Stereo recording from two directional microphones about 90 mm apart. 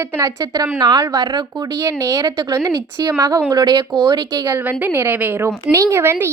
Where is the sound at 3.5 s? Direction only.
50° right (ahead or behind).